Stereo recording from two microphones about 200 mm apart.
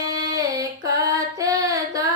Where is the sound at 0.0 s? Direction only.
20° right (ahead or behind).